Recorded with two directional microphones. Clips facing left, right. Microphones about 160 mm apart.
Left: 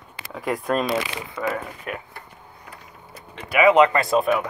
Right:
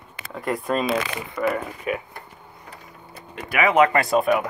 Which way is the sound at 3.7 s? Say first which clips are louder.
Right 2 dB; centre (ahead or behind).